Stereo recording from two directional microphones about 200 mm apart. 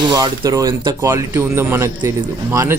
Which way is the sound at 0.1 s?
20° right (ahead or behind).